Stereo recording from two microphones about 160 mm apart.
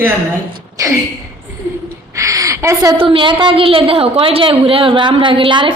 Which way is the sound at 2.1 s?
20° right (ahead or behind).